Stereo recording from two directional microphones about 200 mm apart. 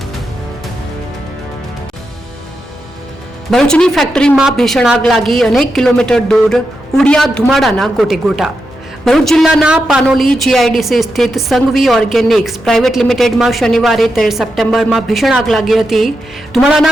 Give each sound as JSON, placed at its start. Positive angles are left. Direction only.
{"t": 3.5, "sound": "a woman's voice", "side_deg": 5}